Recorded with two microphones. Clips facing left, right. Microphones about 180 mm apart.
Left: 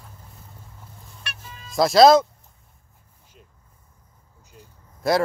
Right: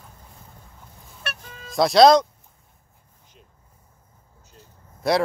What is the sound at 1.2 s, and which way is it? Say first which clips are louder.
Music: right 5 dB; 50° right (ahead or behind).